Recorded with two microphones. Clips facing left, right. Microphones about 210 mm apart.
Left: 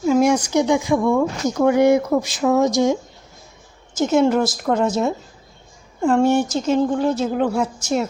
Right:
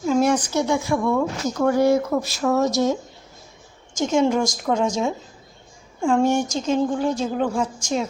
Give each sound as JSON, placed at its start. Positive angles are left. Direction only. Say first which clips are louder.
{"t": 0.0, "sound": "a woman's voice", "louder": "left 3 dB", "side_deg": 10}